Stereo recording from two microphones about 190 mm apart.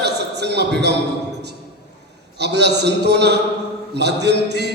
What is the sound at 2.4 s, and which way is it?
A man's voice, 60° right (ahead or behind).